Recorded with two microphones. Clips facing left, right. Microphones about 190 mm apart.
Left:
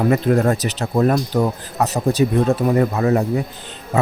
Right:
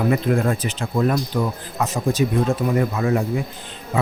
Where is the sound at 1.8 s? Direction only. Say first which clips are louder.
Left 2 dB; 65° left (ahead or behind).